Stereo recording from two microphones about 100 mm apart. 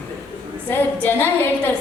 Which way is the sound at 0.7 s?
20° left (ahead or behind).